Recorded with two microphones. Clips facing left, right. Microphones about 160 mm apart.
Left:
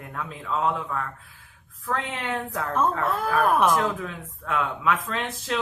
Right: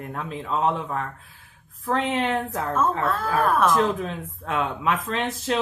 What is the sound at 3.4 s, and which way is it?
Speech, 15° left (ahead or behind).